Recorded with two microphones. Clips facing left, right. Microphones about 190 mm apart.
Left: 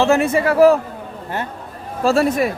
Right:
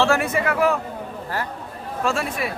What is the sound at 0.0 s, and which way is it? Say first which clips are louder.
Speech: left 5 dB; 25° left (ahead or behind).